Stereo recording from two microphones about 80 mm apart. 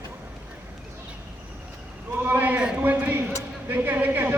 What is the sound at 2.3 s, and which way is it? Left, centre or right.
A man's voice, right.